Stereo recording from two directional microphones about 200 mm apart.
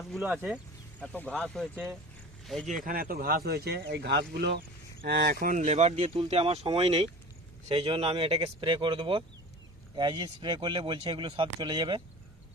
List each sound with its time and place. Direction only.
0.1 s speech: 5° right (ahead or behind)
0.9 s speech: 5° left (ahead or behind)
1.7 s speech: 10° right (ahead or behind)
2.8 s speech: 45° right (ahead or behind); by 12.0 s 25° right (ahead or behind)